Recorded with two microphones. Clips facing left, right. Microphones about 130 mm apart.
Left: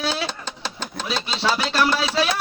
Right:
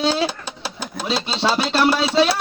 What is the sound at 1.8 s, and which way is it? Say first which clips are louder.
Music: right 4 dB; 10° right (ahead or behind).